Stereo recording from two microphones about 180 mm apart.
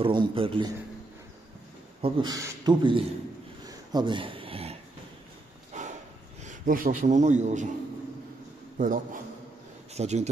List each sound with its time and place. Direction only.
0.0 s speech: 30° right (ahead or behind)
2.0 s speech: 30° right (ahead or behind)
3.6 s a sound: 25° right (ahead or behind); by 5.9 s 40° right (ahead or behind)
6.4 s speech: 50° right (ahead or behind)
8.7 s a man's voice: 45° right (ahead or behind)